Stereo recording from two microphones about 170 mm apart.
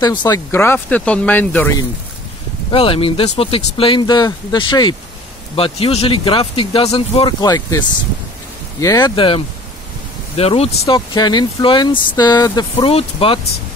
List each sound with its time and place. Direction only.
0.0 s speech: 25° left (ahead or behind)
0.5 s speech: 15° left (ahead or behind)
2.7 s speech: 35° left (ahead or behind)
8.8 s speech: 25° left (ahead or behind)
12.8 s speech: 30° left (ahead or behind)